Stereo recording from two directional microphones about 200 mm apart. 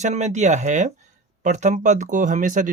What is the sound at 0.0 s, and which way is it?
Speech, 35° right (ahead or behind).